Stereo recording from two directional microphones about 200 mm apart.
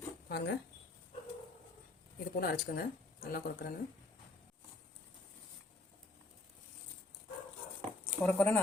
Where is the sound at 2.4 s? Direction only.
45° left (ahead or behind).